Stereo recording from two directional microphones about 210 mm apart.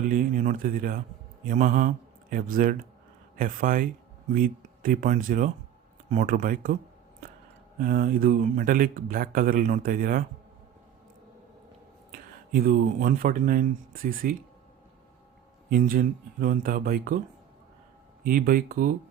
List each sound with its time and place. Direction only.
0.1 s speech: 40° right (ahead or behind)
7.8 s speech: 40° right (ahead or behind)
12.1 s speech: 45° right (ahead or behind)
15.7 s speech: 40° right (ahead or behind)
18.2 s speech: 40° right (ahead or behind)